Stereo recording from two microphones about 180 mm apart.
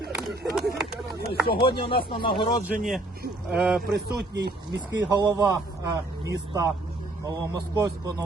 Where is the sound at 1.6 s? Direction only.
30° left (ahead or behind).